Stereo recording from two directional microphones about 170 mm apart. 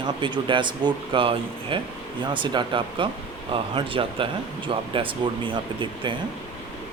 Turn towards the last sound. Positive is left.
turn(degrees=-30)  # may be behind; listen again after turning